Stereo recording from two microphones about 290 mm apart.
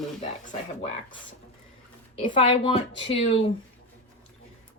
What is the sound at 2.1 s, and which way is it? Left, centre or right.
Speech, centre.